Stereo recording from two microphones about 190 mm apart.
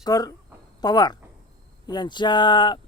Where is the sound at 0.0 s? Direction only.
20° left (ahead or behind).